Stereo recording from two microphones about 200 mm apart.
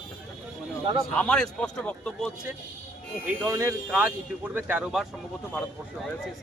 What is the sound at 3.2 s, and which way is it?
Speech, 15° right (ahead or behind).